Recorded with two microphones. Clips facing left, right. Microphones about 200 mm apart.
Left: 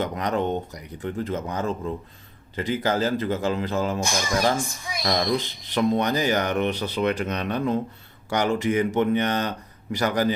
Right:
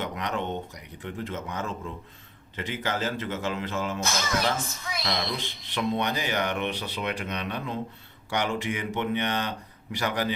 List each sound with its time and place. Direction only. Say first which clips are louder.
0.0 s a man's voice: left 6 dB; 40° left (ahead or behind)
4.0 s speech: left 4 dB; 15° left (ahead or behind)
5.0 s speech: left 8 dB; 45° left (ahead or behind)